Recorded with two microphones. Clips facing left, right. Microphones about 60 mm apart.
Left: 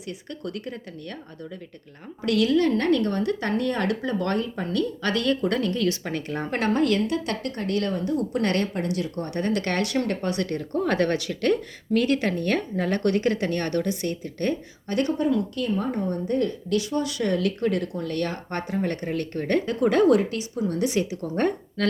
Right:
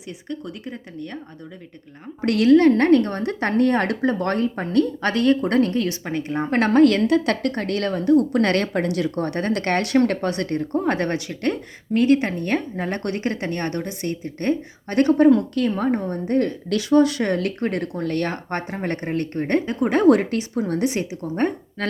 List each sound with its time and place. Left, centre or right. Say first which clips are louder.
0.3 s speech: right 3 dB; centre
2.2 s a woman's voice: right 6 dB; right
5.8 s speech: right 1 dB; right
6.5 s speech: right 7 dB; right
14.8 s speech: right 8 dB; right
16.6 s a woman's voice: right 8 dB; right
20.1 s speech: right 4 dB; right
20.8 s speech: right 1 dB; right